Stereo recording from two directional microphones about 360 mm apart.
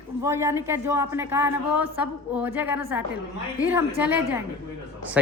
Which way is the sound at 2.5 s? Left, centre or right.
Centre.